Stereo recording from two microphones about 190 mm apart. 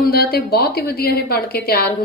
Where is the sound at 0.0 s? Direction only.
55° left (ahead or behind).